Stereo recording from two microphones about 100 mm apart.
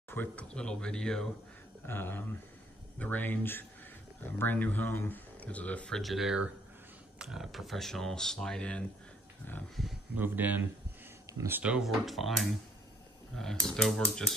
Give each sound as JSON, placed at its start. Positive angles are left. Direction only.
{"t": 0.1, "sound": "speech", "side_deg": 15}
{"t": 1.9, "sound": "speech", "side_deg": 25}
{"t": 9.8, "sound": "speech", "side_deg": 0}
{"t": 10.1, "sound": "speech", "side_deg": -20}
{"t": 11.6, "sound": "speech", "side_deg": -5}
{"t": 13.7, "sound": "speech", "side_deg": 5}